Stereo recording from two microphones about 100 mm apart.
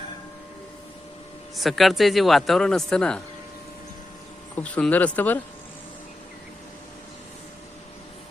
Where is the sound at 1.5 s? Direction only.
Centre (ahead or behind).